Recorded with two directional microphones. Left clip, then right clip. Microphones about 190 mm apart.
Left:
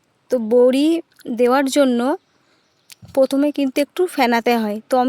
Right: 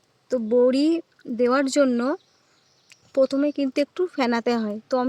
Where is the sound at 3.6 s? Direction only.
35° left (ahead or behind).